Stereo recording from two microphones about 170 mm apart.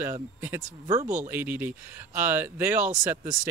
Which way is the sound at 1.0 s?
45° right (ahead or behind).